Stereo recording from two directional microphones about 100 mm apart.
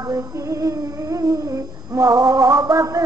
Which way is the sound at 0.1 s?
30° right (ahead or behind).